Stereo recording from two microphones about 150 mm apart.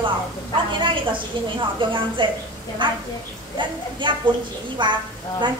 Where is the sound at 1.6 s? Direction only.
35° right (ahead or behind).